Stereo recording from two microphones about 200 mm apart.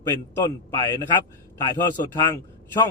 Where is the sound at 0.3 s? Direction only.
15° left (ahead or behind).